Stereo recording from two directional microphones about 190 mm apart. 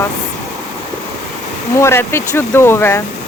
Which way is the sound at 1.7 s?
15° left (ahead or behind).